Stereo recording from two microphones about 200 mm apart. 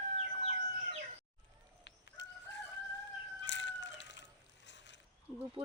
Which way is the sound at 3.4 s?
65° left (ahead or behind).